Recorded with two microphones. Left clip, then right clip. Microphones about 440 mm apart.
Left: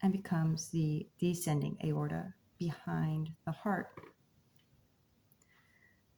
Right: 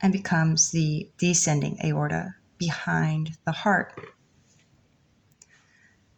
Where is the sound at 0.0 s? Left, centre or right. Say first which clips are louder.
Right 12 dB; left.